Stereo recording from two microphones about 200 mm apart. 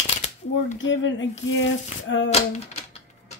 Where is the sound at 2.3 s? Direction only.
30° left (ahead or behind).